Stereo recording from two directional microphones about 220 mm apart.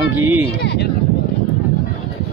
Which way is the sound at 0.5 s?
50° left (ahead or behind).